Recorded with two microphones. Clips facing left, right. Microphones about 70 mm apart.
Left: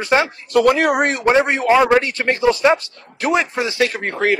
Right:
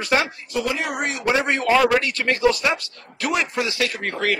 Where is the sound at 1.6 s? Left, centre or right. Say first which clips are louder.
Left 4 dB; centre.